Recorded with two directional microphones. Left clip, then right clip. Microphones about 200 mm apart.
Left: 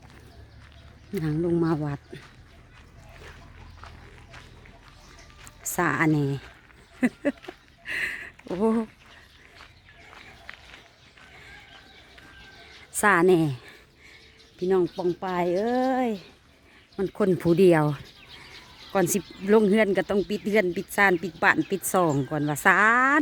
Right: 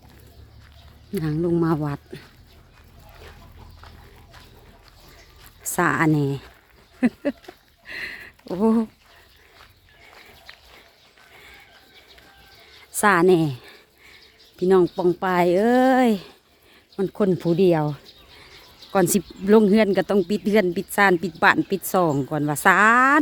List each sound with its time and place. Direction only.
1.1 s speech: 5° right (ahead or behind)
5.4 s speech: 10° right (ahead or behind)
7.9 s a sound: centre (ahead or behind)
13.0 s speech: 5° right (ahead or behind)
14.7 s speech: 20° right (ahead or behind)
17.0 s speech: 5° right (ahead or behind)
18.9 s speech: 10° right (ahead or behind)